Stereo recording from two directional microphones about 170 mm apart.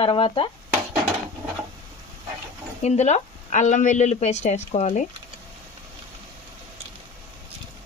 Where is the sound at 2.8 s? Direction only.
40° left (ahead or behind).